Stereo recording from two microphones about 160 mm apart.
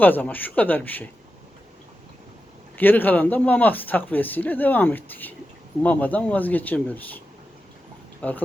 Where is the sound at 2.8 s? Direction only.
10° left (ahead or behind).